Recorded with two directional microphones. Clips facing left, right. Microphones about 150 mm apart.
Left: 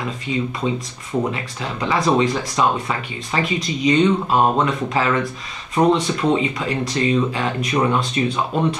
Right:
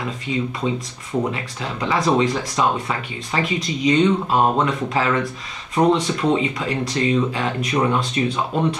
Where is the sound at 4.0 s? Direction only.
30° left (ahead or behind).